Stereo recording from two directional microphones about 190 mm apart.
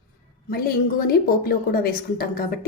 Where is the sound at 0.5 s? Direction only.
50° left (ahead or behind).